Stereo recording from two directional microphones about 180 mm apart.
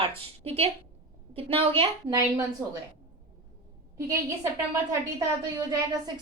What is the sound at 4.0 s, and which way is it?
A woman's voice, 15° right (ahead or behind).